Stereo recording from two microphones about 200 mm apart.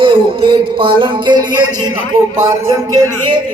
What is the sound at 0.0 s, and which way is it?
A man's voice, 25° right (ahead or behind).